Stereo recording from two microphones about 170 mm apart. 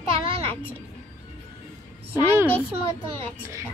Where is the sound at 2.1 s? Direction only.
15° right (ahead or behind).